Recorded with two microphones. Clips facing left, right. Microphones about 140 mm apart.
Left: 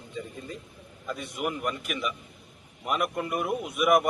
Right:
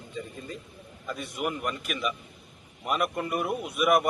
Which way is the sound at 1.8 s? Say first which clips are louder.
Right 1 dB; 20° left (ahead or behind).